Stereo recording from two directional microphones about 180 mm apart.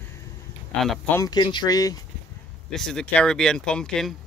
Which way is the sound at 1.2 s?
25° left (ahead or behind).